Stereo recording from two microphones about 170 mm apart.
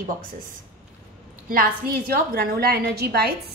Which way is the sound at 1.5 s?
60° right (ahead or behind).